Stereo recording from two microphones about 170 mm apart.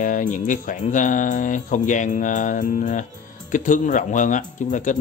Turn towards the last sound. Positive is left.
turn(degrees=45)  # may be behind; listen again after turning